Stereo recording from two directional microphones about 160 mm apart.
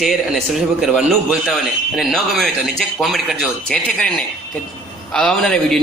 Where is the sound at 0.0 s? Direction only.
Centre (ahead or behind).